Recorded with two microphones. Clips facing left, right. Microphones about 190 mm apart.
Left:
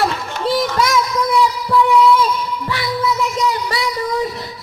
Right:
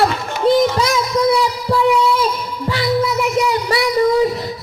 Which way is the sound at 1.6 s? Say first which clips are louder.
Left 2 dB; 30° right (ahead or behind).